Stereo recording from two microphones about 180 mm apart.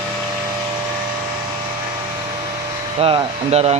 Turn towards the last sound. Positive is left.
turn(degrees=-35)  # may be behind; listen again after turning